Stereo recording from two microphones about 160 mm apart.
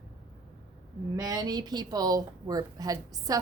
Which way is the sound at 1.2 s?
25° right (ahead or behind).